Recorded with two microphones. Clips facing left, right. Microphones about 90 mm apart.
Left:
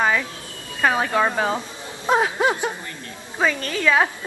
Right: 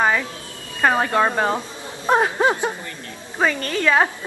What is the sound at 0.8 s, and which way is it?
Speech, centre (ahead or behind).